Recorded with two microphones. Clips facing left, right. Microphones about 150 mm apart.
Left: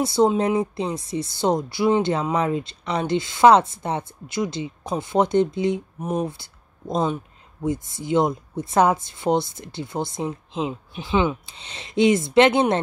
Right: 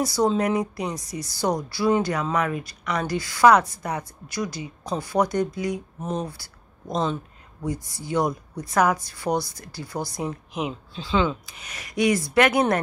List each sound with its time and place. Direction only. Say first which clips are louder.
0.0 s speech: left 3 dB; 25° left (ahead or behind)
5.9 s speech: left 3 dB; 10° left (ahead or behind)
6.2 s speech: left 6 dB; 20° left (ahead or behind)
6.9 s speech: left 2 dB; 5° left (ahead or behind)
7.6 s speech: left 4 dB; 20° left (ahead or behind)